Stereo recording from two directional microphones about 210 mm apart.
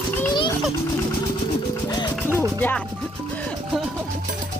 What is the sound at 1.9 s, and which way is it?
Music, 15° left (ahead or behind).